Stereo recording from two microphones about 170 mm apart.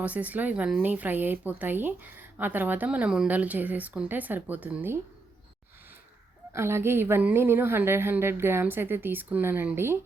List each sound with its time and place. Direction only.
0.0 s speech: 10° right (ahead or behind)
6.5 s speech: 15° right (ahead or behind)